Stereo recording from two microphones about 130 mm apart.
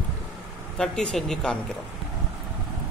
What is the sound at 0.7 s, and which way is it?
Speech, 5° left (ahead or behind).